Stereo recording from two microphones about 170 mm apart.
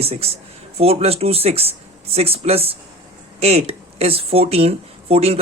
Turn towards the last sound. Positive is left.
turn(degrees=-35)  # may be behind; listen again after turning